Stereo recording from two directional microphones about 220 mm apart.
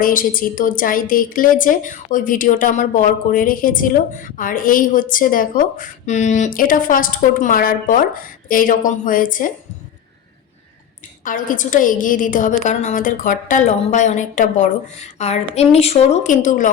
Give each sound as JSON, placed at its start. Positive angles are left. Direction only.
{"t": 0.0, "sound": "a woman's voice", "side_deg": 40}
{"t": 11.2, "sound": "a woman's voice", "side_deg": 35}